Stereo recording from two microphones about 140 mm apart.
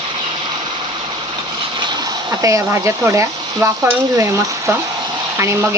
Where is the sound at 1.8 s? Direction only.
30° right (ahead or behind).